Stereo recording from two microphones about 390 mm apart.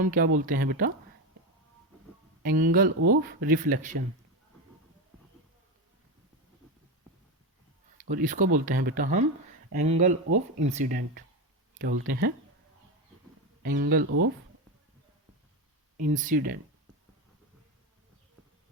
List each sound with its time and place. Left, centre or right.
0.0 s speech: right
2.4 s speech: right
8.1 s speech: centre
10.2 s speech: right
10.7 s speech: centre
13.6 s speech: right
16.0 s speech: centre